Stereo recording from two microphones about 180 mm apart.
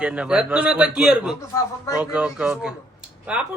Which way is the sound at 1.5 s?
15° left (ahead or behind).